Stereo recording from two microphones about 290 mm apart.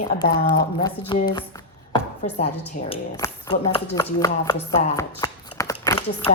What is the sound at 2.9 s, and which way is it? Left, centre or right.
Speech, centre.